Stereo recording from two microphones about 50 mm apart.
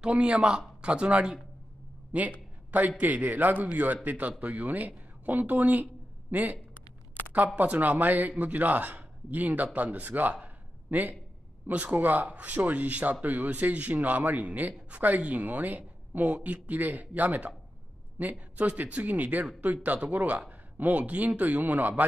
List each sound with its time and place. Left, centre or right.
0.0 s speech: right
2.1 s a man's voice: right